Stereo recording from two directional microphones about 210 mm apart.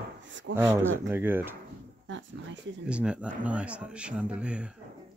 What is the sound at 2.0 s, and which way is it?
Speech, 65° right (ahead or behind).